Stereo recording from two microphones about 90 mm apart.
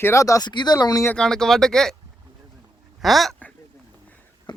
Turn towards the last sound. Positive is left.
turn(degrees=60)  # may be behind; listen again after turning